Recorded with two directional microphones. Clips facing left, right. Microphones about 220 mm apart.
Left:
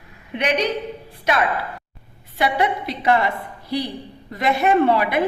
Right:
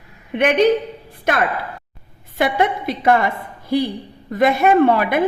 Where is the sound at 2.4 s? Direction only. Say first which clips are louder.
Right 3 dB; 50° right (ahead or behind).